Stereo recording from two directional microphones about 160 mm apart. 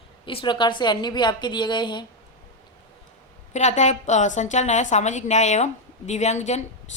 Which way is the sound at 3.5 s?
45° left (ahead or behind).